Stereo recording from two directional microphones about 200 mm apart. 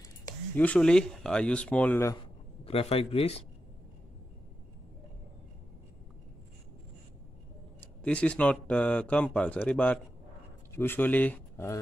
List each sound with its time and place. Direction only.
0.6 s speech: 5° left (ahead or behind)
2.6 s a man's voice: 30° left (ahead or behind)
8.0 s speech: 5° left (ahead or behind)